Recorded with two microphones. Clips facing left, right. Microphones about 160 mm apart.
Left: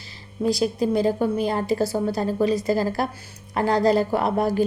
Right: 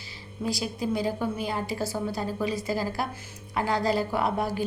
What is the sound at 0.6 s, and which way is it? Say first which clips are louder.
A woman's voice: left 7 dB; 45° left (ahead or behind).